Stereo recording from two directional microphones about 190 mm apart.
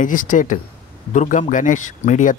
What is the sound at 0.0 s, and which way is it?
A man's voice, 45° left (ahead or behind).